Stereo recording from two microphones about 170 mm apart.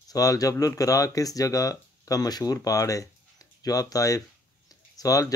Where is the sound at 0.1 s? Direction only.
20° left (ahead or behind).